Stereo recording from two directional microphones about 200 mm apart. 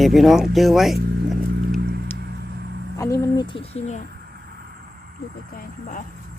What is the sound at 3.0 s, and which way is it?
Speech, 15° left (ahead or behind).